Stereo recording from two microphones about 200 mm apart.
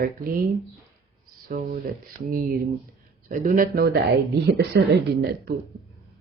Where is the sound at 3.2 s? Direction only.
40° right (ahead or behind).